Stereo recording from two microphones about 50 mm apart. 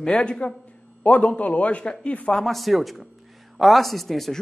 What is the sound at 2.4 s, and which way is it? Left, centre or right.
Speech, centre.